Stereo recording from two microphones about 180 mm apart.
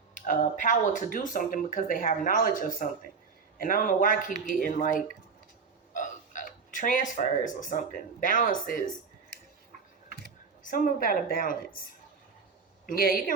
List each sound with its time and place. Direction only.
0.1 s speech: 45° left (ahead or behind)
10.2 s speech: 50° left (ahead or behind)
12.8 s a man's voice: 55° left (ahead or behind)